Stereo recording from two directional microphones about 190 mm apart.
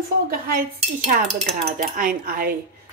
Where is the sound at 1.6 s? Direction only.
45° right (ahead or behind).